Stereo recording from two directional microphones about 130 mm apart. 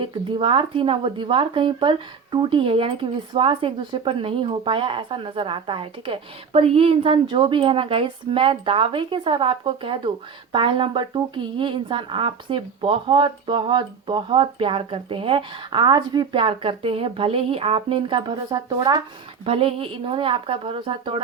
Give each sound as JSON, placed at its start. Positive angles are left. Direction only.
{"t": 0.0, "sound": "speech", "side_deg": -40}
{"t": 19.5, "sound": "a woman's voice", "side_deg": -45}